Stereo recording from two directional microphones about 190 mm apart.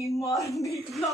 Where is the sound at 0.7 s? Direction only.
Centre (ahead or behind).